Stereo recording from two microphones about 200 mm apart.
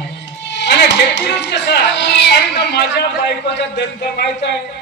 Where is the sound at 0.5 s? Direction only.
60° left (ahead or behind).